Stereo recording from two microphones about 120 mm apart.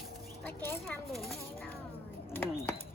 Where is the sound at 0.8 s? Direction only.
Centre (ahead or behind).